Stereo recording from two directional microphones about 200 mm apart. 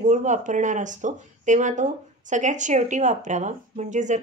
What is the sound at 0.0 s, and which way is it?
A woman's voice, 40° right (ahead or behind).